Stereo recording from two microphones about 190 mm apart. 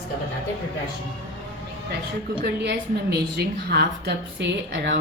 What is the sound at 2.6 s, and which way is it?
A woman's voice, 60° right (ahead or behind).